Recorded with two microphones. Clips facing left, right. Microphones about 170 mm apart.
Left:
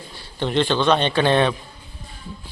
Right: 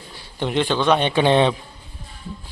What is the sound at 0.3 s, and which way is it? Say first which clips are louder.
A man's voice: left 1 dB; 15° right (ahead or behind).